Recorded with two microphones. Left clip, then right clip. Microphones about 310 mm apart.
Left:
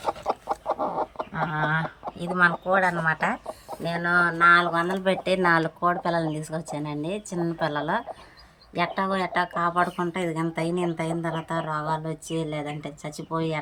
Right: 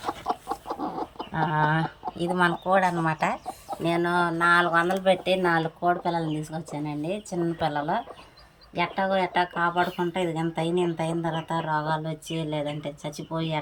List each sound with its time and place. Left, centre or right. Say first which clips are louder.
0.3 s chicken: left 2 dB; centre
1.5 s speech: right 1 dB; centre